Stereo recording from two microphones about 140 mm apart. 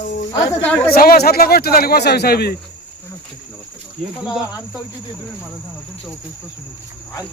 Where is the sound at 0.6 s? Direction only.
10° left (ahead or behind).